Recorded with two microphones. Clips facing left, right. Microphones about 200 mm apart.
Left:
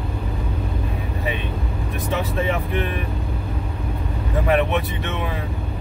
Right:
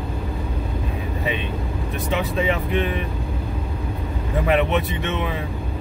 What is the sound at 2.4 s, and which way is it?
Speech, 20° right (ahead or behind).